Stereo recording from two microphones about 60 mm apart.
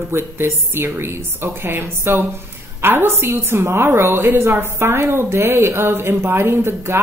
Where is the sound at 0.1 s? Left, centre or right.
Right.